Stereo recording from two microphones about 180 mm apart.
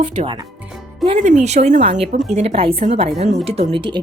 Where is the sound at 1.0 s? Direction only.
35° right (ahead or behind).